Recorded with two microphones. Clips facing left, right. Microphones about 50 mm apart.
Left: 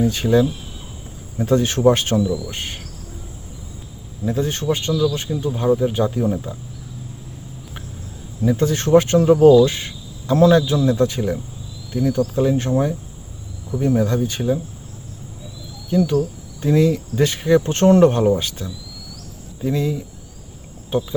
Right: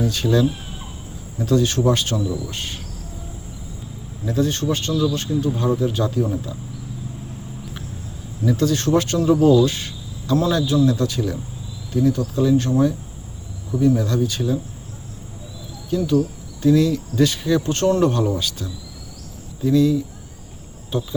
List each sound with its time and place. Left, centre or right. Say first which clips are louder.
0.0 s speech: left 2 dB; left
4.3 s speech: even; left
6.2 s speech: left 3 dB; left
8.4 s speech: left 1 dB; left
16.0 s speech: right 1 dB; left